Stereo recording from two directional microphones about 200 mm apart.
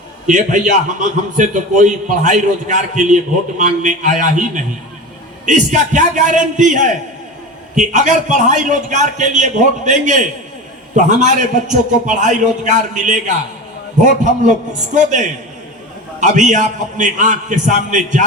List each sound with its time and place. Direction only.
0.3 s a man's voice: 40° right (ahead or behind)
16.2 s a man's voice: 35° right (ahead or behind)